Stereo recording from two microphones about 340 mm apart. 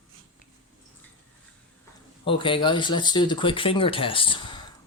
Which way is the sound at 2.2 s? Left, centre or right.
Centre.